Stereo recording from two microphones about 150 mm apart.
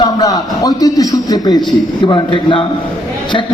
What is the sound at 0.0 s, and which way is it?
A man's voice, 25° left (ahead or behind).